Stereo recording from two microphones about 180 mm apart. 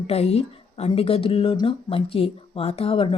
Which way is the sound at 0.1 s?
35° left (ahead or behind).